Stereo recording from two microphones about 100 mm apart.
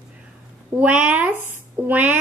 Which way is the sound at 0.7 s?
15° right (ahead or behind).